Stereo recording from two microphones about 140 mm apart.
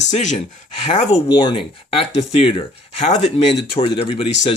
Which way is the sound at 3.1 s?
55° left (ahead or behind).